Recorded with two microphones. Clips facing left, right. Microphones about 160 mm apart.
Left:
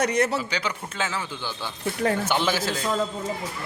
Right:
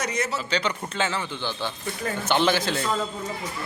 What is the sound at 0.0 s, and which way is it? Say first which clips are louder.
Speech: left 6 dB; 60° left (ahead or behind).